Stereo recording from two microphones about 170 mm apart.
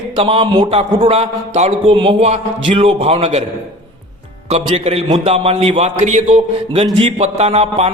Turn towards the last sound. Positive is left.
turn(degrees=-35)  # may be behind; listen again after turning